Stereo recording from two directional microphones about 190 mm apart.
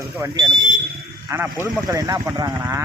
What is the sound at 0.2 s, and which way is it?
Speech, 15° right (ahead or behind).